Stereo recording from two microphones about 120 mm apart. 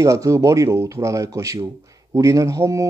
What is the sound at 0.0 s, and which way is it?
Speech, 25° right (ahead or behind).